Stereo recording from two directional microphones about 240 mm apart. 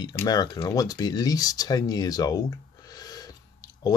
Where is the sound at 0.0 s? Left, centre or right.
Centre.